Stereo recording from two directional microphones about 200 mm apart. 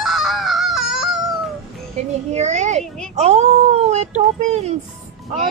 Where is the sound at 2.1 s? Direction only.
35° right (ahead or behind).